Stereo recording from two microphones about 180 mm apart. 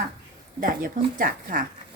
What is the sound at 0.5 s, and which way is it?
A woman's voice, 50° right (ahead or behind).